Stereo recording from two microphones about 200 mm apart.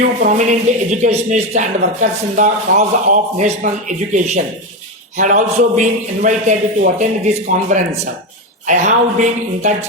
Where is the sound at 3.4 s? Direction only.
40° right (ahead or behind).